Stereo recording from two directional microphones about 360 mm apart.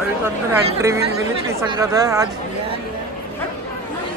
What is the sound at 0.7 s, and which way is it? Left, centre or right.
Speech, centre.